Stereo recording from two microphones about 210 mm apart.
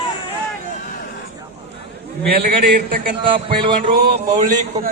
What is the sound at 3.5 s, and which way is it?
Music, 25° right (ahead or behind).